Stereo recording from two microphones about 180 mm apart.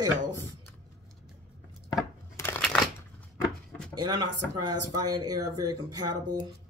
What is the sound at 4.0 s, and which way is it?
Speech, 25° right (ahead or behind).